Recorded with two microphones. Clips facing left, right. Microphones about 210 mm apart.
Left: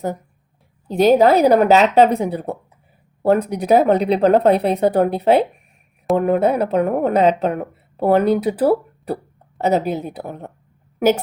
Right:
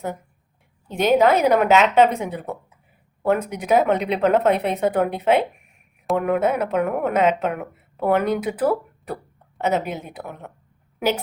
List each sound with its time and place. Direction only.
0.9 s a woman's voice: 35° left (ahead or behind)